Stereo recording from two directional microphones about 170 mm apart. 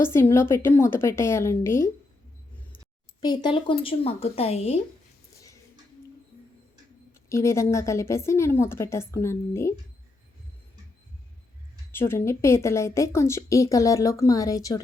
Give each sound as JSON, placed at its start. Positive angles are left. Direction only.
{"t": 0.0, "sound": "a woman's voice", "side_deg": 15}
{"t": 3.2, "sound": "speech", "side_deg": 25}
{"t": 7.3, "sound": "a woman's voice", "side_deg": 15}
{"t": 11.9, "sound": "a woman's voice", "side_deg": 15}